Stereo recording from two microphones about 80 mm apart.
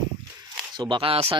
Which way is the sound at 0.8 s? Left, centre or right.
Right.